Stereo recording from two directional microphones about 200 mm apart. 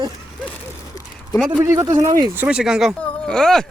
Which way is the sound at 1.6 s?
15° right (ahead or behind).